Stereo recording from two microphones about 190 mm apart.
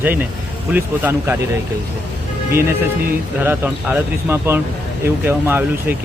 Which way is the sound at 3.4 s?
10° right (ahead or behind).